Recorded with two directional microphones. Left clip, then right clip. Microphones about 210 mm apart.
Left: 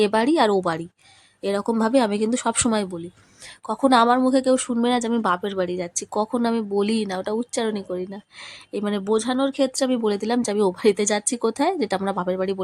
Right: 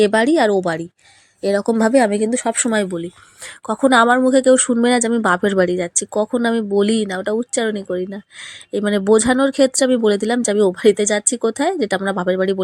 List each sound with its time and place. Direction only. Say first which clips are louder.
0.0 s a woman's voice: right 5 dB; 15° right (ahead or behind)